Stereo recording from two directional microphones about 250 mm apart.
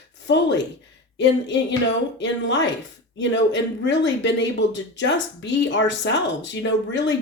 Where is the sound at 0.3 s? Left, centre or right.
Left.